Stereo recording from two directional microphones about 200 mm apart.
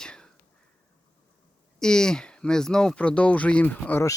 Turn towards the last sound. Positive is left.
turn(degrees=10)  # may be behind; listen again after turning